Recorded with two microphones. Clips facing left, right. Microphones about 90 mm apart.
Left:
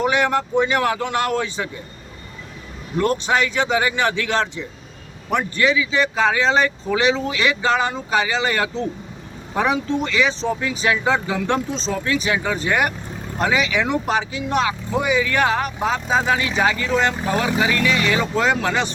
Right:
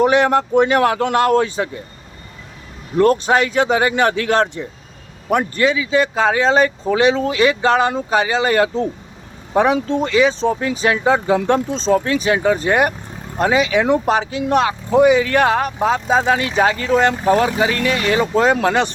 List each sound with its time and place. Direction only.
0.0 s speech: 45° right (ahead or behind)
3.0 s speech: 45° right (ahead or behind)
10.0 s speech: 40° right (ahead or behind); by 18.9 s 55° right (ahead or behind)